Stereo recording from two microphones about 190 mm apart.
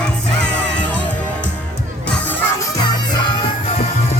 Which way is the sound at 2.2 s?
10° left (ahead or behind).